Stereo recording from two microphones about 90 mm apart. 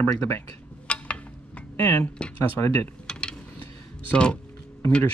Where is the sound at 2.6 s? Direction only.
30° left (ahead or behind).